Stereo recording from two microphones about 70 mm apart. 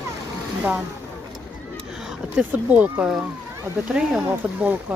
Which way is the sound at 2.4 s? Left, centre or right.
Right.